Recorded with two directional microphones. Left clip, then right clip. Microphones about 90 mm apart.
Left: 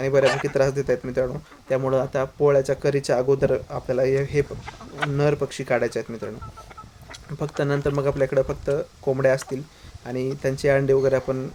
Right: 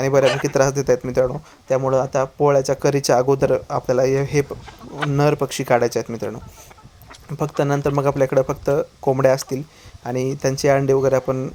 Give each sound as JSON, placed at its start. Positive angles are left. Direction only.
{"t": 0.0, "sound": "speech", "side_deg": -30}
{"t": 1.9, "sound": "speech", "side_deg": -15}
{"t": 2.9, "sound": "speech", "side_deg": -40}
{"t": 7.3, "sound": "speech", "side_deg": -20}